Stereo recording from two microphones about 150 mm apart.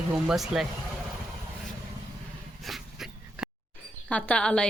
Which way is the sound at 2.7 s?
Centre (ahead or behind).